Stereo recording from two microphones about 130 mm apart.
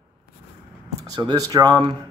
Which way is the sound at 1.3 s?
30° right (ahead or behind).